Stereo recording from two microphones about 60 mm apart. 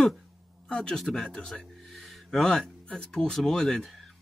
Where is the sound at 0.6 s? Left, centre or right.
Centre.